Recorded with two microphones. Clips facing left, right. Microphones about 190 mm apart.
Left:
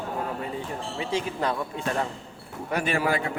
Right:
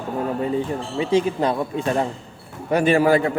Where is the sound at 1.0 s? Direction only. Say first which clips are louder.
Right 9 dB; 20° right (ahead or behind).